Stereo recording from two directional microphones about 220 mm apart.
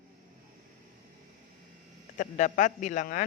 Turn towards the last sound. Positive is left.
turn(degrees=35)  # may be behind; listen again after turning